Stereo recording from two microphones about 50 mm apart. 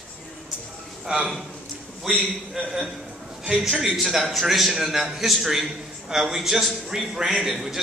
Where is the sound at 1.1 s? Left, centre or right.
Right.